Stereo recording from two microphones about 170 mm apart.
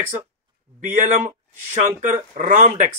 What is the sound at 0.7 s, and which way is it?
Speech, 45° right (ahead or behind).